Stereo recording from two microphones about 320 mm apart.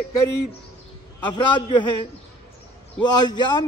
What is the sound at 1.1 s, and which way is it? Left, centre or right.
A man's voice, centre.